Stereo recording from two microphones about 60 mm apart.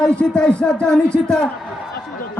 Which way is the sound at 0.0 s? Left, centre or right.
Centre.